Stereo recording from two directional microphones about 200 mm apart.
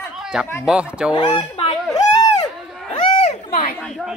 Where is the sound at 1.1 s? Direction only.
25° left (ahead or behind).